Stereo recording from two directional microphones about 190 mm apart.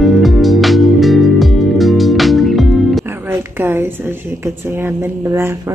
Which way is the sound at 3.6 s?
10° right (ahead or behind).